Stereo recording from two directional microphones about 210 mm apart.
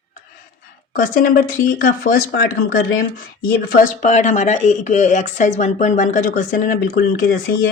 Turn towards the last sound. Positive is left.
turn(degrees=45)  # may be behind; listen again after turning